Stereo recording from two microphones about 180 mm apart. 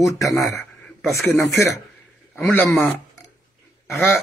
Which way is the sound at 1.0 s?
Centre (ahead or behind).